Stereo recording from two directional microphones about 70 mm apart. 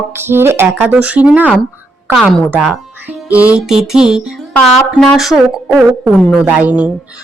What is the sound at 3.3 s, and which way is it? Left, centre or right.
Speech, right.